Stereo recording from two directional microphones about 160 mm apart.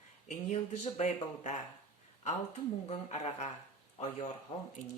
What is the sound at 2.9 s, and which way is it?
Speech, 40° left (ahead or behind).